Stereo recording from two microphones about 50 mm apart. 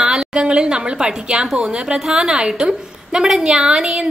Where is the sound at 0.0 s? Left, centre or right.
Centre.